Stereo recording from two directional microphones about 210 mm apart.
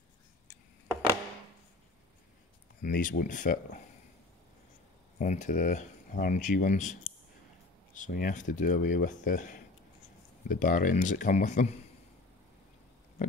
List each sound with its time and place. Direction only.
2.8 s speech: 40° left (ahead or behind)
5.2 s speech: 35° left (ahead or behind)